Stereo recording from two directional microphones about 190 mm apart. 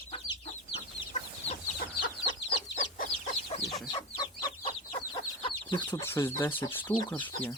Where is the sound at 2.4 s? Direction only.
55° left (ahead or behind).